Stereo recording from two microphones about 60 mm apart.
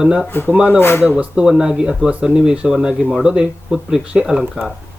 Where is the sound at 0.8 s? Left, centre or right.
Left.